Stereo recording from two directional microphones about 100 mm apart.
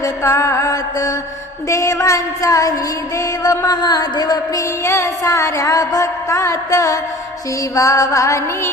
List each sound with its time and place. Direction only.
0.0 s music: 30° left (ahead or behind)